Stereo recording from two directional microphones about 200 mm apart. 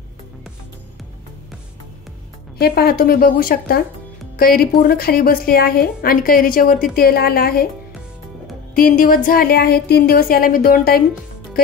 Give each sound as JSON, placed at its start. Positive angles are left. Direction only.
{"t": 2.6, "sound": "a woman's voice", "side_deg": 50}
{"t": 8.7, "sound": "a woman's voice", "side_deg": 45}